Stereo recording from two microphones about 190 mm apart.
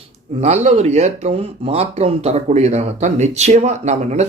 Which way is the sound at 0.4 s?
35° right (ahead or behind).